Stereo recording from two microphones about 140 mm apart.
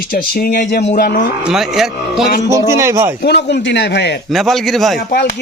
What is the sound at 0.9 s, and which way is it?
Speech, 90° left.